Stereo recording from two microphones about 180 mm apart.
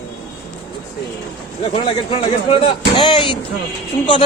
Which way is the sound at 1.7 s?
30° left (ahead or behind).